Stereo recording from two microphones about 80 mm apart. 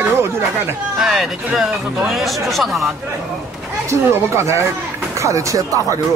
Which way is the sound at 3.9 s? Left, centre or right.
Right.